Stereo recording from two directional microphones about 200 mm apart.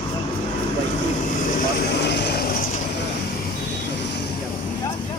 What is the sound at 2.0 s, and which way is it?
Speech, 55° left (ahead or behind).